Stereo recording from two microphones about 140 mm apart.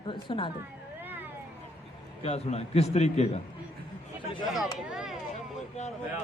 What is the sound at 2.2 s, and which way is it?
A man's voice, 45° left (ahead or behind).